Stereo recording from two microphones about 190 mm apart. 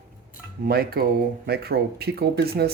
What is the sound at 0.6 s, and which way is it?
Speech, 55° right (ahead or behind).